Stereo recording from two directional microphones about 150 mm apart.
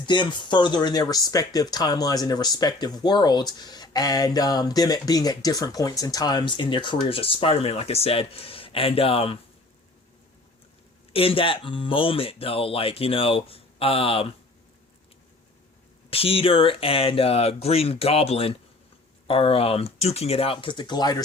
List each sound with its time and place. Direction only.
0.0 s speech: 30° left (ahead or behind)
11.1 s speech: 40° left (ahead or behind)
16.0 s speech: 40° left (ahead or behind)